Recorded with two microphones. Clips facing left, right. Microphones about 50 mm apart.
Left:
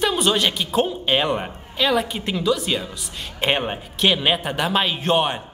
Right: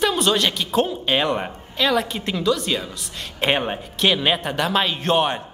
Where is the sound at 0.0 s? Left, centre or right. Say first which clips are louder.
Even; centre.